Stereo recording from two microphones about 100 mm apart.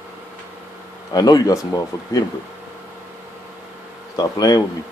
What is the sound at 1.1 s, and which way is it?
Speech, 40° left (ahead or behind).